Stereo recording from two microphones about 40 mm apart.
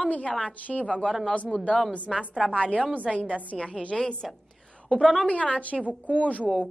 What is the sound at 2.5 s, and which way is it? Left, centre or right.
Speech, left.